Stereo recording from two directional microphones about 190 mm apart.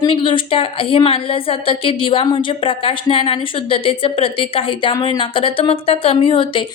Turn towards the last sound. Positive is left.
turn(degrees=30)  # may be behind; listen again after turning